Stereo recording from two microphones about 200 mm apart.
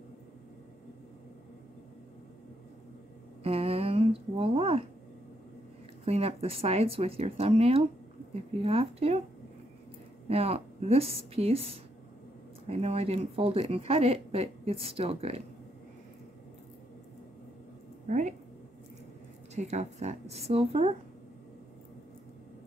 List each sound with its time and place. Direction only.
3.4 s a sound: 30° right (ahead or behind)
6.0 s speech: 30° right (ahead or behind)
10.2 s speech: 30° right (ahead or behind)
18.0 s speech: 40° right (ahead or behind)
19.5 s speech: 35° right (ahead or behind)